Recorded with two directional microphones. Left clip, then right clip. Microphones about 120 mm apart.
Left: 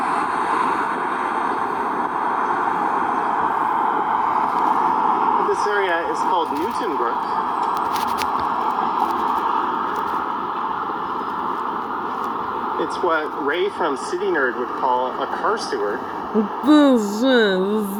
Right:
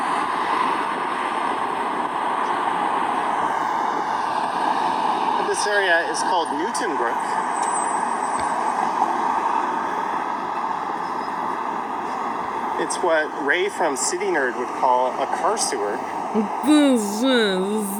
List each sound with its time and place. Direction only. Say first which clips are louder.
3.4 s vehicle: left 2 dB; 5° right (ahead or behind)
8.8 s vehicle: left 1 dB; 20° right (ahead or behind)
13.1 s speech: right 2 dB; 20° right (ahead or behind)
16.6 s speech: left 3 dB; 30° right (ahead or behind)